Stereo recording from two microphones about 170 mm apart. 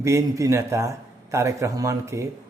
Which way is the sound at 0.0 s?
15° right (ahead or behind).